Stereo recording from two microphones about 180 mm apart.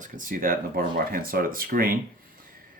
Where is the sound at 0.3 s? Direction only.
50° right (ahead or behind).